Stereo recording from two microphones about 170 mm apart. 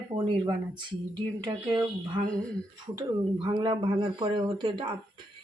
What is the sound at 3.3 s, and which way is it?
Speech, 30° right (ahead or behind).